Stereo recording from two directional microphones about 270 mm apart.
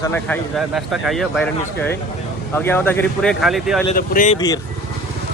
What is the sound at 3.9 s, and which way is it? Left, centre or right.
Speech, left.